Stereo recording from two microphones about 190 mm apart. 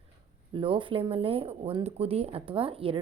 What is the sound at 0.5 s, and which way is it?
A woman's voice, 30° right (ahead or behind).